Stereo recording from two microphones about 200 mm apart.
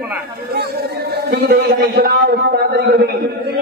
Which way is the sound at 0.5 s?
55° right (ahead or behind).